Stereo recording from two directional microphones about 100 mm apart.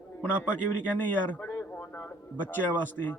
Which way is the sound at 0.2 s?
20° left (ahead or behind).